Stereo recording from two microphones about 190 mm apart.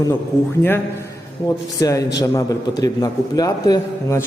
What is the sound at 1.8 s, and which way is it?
A man's voice, 20° left (ahead or behind).